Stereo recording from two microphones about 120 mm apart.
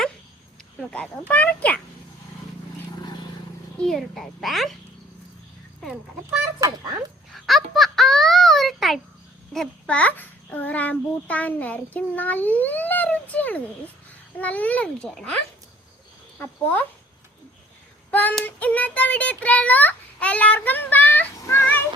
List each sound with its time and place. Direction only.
0.8 s a child's voice: 5° left (ahead or behind)
3.8 s a child's voice: centre (ahead or behind)
6.6 s a child's voice: 30° right (ahead or behind)
7.4 s a sound: centre (ahead or behind)
9.5 s a child's voice: 5° left (ahead or behind)
18.1 s child singing: 15° left (ahead or behind)
18.4 s a child's voice: 15° left (ahead or behind)
21.4 s child singing: 20° left (ahead or behind)